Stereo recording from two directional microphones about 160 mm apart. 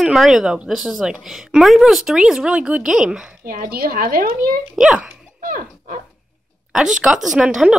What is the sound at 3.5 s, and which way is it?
A woman's voice, 65° right (ahead or behind).